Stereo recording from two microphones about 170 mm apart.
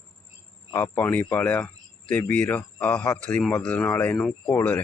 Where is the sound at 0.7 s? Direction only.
15° left (ahead or behind).